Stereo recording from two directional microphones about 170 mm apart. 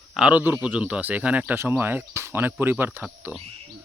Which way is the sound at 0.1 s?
5° right (ahead or behind).